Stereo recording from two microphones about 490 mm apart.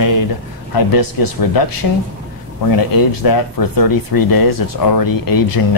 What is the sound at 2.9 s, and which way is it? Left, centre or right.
Speech, left.